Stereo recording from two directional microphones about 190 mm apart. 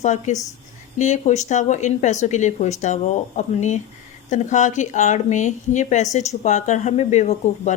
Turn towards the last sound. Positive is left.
turn(degrees=40)  # may be behind; listen again after turning